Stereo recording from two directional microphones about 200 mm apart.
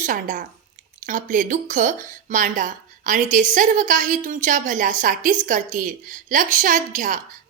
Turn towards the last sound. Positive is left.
turn(degrees=-40)  # may be behind; listen again after turning